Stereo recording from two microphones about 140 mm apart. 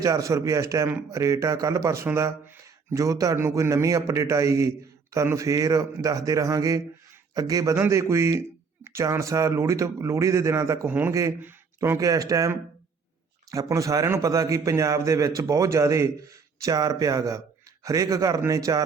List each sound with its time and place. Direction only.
0.0 s speech: 25° right (ahead or behind)